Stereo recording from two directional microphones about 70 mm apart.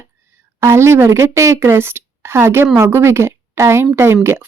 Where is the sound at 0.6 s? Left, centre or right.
Right.